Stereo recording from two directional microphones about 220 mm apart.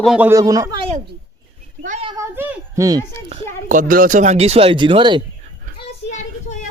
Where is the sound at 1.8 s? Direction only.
35° right (ahead or behind).